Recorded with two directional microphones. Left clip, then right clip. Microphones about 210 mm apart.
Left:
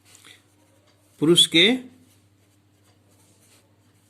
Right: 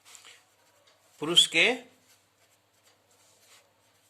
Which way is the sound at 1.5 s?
15° left (ahead or behind).